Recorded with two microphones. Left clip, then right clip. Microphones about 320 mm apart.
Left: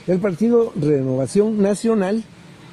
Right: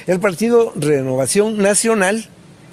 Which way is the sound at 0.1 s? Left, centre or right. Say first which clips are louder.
Right 3 dB; right.